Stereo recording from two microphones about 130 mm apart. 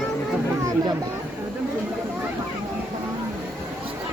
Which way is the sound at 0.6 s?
30° right (ahead or behind).